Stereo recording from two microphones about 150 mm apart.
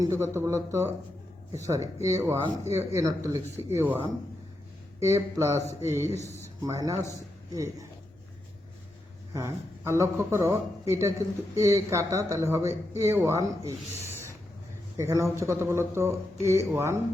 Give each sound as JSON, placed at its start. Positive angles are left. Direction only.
{"t": 0.0, "sound": "a man's voice", "side_deg": -20}
{"t": 9.3, "sound": "a man's voice", "side_deg": -20}